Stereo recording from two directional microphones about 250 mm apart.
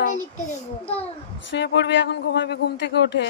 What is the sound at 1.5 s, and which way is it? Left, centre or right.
Speech, left.